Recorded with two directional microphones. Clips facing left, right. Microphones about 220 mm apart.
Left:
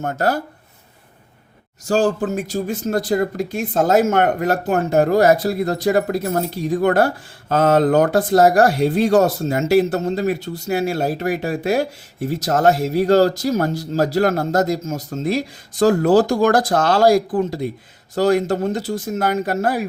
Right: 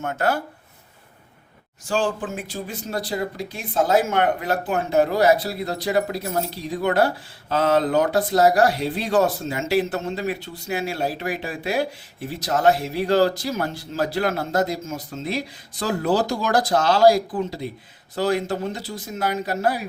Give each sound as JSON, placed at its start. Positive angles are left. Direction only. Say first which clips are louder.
{"t": 0.0, "sound": "speech", "louder": "left 3 dB", "side_deg": 40}
{"t": 1.9, "sound": "speech", "louder": "left 6 dB", "side_deg": 40}